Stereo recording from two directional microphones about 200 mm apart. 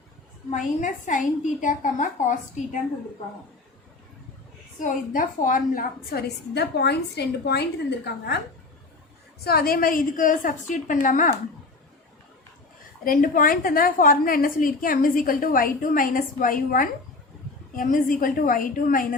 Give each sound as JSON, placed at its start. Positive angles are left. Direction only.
{"t": 0.5, "sound": "a woman's voice", "side_deg": 40}
{"t": 4.8, "sound": "a woman's voice", "side_deg": 40}
{"t": 9.4, "sound": "a woman's voice", "side_deg": 50}
{"t": 13.1, "sound": "a woman's voice", "side_deg": 45}